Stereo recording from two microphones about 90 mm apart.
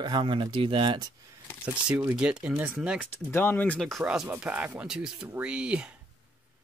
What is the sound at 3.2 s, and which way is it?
Speech, 25° left (ahead or behind).